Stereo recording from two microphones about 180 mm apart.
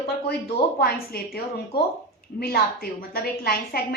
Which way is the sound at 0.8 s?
55° left (ahead or behind).